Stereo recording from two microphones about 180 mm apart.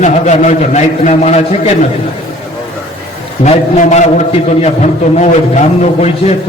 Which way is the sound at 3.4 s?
40° left (ahead or behind).